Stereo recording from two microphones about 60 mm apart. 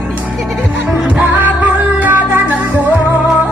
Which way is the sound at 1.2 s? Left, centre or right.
Right.